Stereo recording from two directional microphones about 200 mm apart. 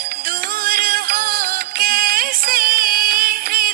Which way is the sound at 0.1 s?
45° right (ahead or behind).